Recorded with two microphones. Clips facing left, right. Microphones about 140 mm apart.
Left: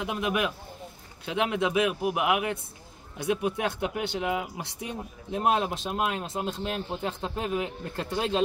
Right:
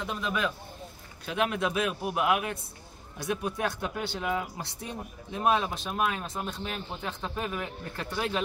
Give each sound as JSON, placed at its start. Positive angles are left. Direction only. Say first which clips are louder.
{"t": 0.0, "sound": "speech", "louder": "left 3 dB", "side_deg": 15}
{"t": 5.3, "sound": "speech", "louder": "left 1 dB", "side_deg": 30}
{"t": 6.9, "sound": "speech", "louder": "left 4 dB", "side_deg": 35}